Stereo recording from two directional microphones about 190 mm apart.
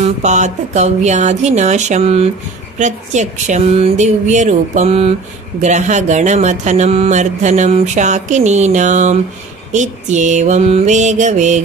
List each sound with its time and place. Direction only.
0.0 s speech: 40° right (ahead or behind)